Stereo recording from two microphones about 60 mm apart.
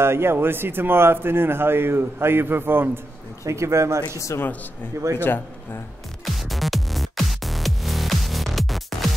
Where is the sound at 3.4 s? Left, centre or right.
Right.